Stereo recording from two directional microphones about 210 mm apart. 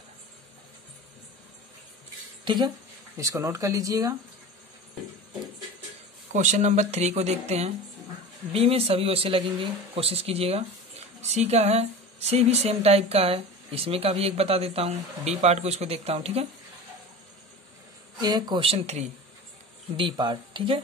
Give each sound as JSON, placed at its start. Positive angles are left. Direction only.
{"t": 2.4, "sound": "speech", "side_deg": -20}
{"t": 6.3, "sound": "speech", "side_deg": -35}
{"t": 18.2, "sound": "speech", "side_deg": -20}